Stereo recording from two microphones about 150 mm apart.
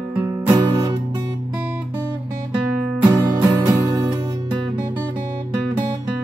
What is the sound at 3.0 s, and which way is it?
Music, 25° right (ahead or behind).